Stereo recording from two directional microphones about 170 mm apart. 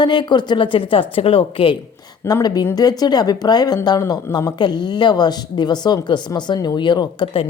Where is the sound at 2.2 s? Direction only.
20° left (ahead or behind).